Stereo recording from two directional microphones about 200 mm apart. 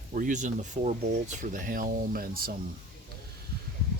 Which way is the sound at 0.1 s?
40° right (ahead or behind).